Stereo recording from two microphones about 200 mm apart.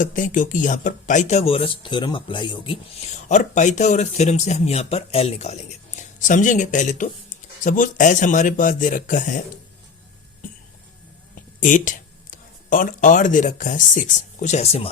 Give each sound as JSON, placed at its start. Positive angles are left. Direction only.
{"t": 0.0, "sound": "speech", "side_deg": 40}
{"t": 3.1, "sound": "speech", "side_deg": 35}
{"t": 11.6, "sound": "speech", "side_deg": 40}